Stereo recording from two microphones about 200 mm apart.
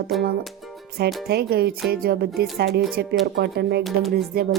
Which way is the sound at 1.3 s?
55° right (ahead or behind).